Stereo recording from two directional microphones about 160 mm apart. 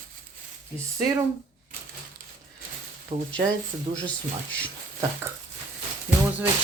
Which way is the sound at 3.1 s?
35° right (ahead or behind).